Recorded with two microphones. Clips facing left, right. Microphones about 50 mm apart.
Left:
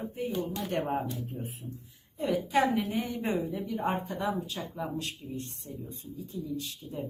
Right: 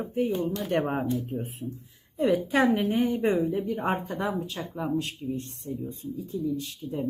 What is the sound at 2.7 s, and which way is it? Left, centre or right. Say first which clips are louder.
Speech: right 6 dB; right.